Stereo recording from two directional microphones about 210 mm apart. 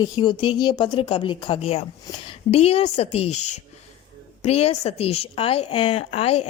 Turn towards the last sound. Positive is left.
turn(degrees=30)  # may be behind; listen again after turning